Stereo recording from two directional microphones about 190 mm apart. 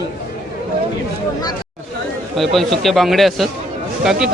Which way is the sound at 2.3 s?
Centre (ahead or behind).